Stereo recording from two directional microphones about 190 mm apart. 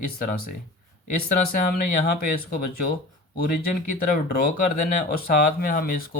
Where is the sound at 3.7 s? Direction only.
50° left (ahead or behind).